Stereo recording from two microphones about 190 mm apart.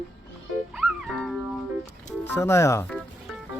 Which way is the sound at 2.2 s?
10° left (ahead or behind).